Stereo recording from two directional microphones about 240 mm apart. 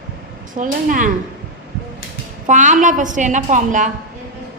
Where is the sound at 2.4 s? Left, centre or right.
Right.